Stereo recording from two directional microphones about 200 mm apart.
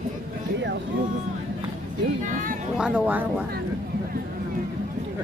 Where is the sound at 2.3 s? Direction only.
40° right (ahead or behind).